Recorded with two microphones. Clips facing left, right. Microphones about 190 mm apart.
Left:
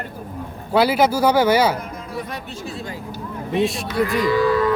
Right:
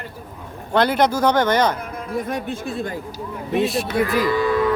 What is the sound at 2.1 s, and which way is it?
Speech, 50° right (ahead or behind).